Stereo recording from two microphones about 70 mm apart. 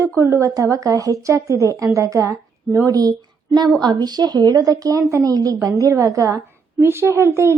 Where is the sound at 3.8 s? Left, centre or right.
Right.